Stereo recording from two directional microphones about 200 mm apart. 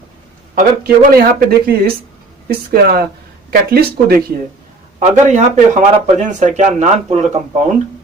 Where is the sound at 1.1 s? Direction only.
50° right (ahead or behind).